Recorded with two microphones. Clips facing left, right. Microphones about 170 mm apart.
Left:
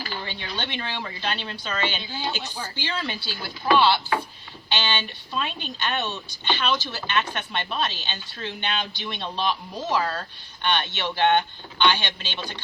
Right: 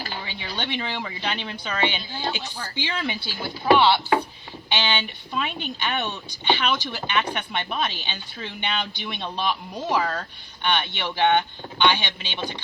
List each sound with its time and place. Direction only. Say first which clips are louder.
0.3 s speech: right 1 dB; 15° right (ahead or behind)